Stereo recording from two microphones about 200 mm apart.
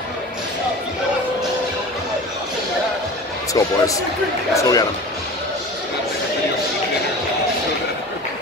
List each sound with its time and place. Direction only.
3.5 s speech: 15° left (ahead or behind)